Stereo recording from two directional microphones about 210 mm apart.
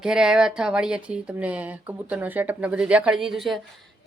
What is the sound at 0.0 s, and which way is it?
Speech, 5° right (ahead or behind).